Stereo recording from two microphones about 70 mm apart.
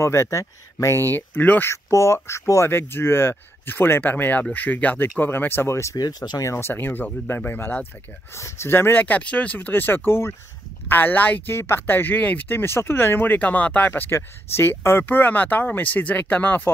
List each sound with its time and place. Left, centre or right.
0.0 s speech: left
1.7 s speech: left
2.7 s speech: left
5.9 s speech: left
6.4 s speech: left
6.7 s speech: left
8.4 s speech: left
11.5 s speech: left